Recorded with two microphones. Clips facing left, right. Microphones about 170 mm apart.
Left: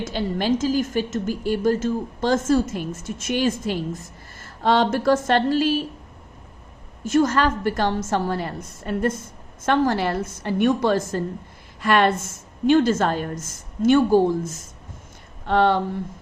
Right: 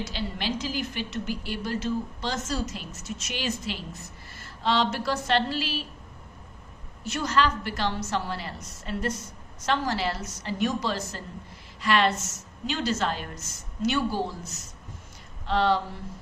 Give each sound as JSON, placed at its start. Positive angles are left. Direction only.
{"t": 0.0, "sound": "a woman's voice", "side_deg": 50}
{"t": 7.0, "sound": "a woman's voice", "side_deg": 50}